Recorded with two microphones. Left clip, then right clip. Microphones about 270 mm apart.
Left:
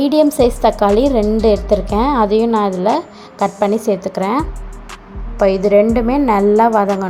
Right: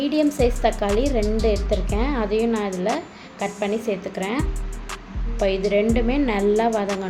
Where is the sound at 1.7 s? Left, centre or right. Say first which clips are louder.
Left 10 dB; left.